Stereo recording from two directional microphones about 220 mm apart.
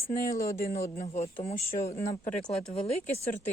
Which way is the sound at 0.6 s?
40° left (ahead or behind).